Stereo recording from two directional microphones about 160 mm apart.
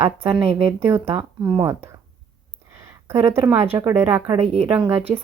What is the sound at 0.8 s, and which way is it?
Speech, 15° right (ahead or behind).